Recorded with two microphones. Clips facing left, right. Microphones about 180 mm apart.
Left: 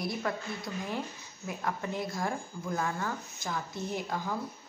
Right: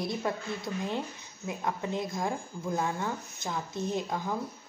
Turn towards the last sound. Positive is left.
turn(degrees=-20)  # may be behind; listen again after turning